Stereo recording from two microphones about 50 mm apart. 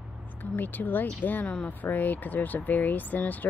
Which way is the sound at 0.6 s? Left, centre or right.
Left.